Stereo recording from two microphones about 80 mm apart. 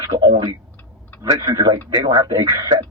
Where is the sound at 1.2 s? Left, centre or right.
Right.